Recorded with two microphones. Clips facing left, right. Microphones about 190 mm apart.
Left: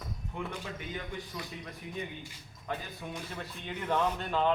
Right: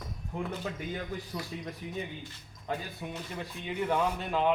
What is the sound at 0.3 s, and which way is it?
Speech, 35° right (ahead or behind).